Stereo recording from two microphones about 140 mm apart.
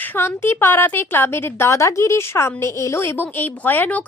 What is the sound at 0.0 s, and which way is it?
A woman's voice, 15° left (ahead or behind).